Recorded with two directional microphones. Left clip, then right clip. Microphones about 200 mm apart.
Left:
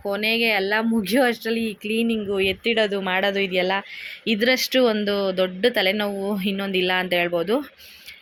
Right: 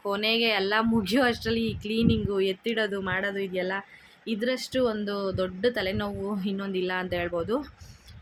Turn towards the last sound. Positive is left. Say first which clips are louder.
# left 7 dB
turn(degrees=15)  # may be behind; listen again after turning